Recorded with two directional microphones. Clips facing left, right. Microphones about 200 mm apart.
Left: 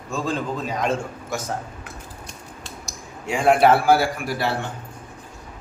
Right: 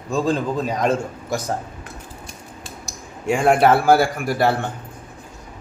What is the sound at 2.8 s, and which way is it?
A man's voice, 50° right (ahead or behind).